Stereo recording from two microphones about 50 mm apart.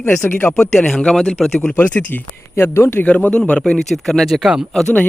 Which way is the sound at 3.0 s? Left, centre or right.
Left.